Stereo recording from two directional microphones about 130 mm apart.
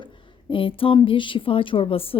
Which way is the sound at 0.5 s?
45° left (ahead or behind).